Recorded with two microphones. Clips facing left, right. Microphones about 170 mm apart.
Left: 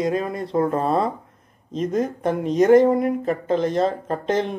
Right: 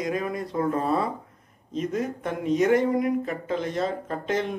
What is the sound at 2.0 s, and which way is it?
Speech, 35° left (ahead or behind).